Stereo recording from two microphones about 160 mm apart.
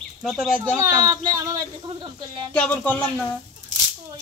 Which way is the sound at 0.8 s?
20° right (ahead or behind).